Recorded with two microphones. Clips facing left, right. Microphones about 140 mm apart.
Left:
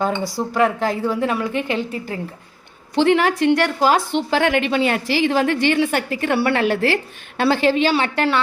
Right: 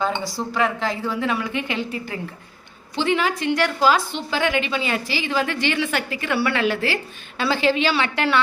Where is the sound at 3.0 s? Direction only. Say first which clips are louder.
Left 6 dB; 65° left (ahead or behind).